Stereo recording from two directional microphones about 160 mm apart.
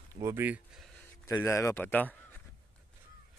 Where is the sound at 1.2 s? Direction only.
15° left (ahead or behind).